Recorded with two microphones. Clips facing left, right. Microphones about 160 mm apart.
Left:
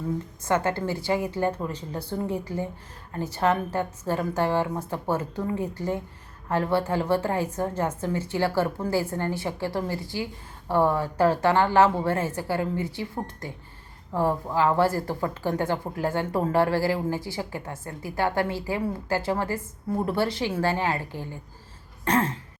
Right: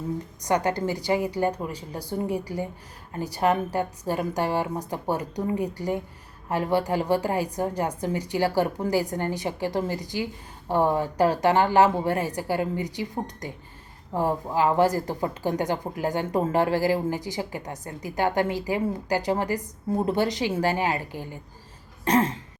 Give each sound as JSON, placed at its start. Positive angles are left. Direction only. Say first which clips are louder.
{"t": 0.4, "sound": "a woman's voice", "louder": "right 1 dB", "side_deg": -15}
{"t": 22.0, "sound": "throat clearing", "louder": "right 2 dB", "side_deg": -15}